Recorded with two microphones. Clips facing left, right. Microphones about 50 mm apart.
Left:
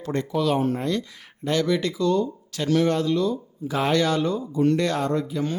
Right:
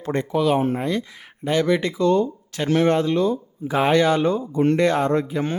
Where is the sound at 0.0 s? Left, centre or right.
Right.